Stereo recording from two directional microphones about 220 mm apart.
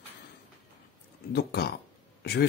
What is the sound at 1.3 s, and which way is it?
Speech, 50° left (ahead or behind).